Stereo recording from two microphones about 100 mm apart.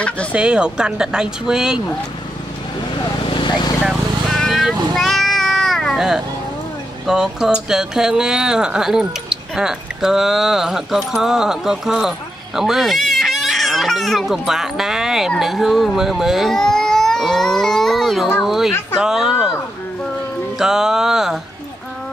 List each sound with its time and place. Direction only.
0.3 s speech: 10° right (ahead or behind)
3.3 s a sound: 50° left (ahead or behind)
3.8 s cat: centre (ahead or behind)
7.1 s speech: 5° right (ahead or behind)
18.4 s music: centre (ahead or behind)
20.5 s music: 5° right (ahead or behind)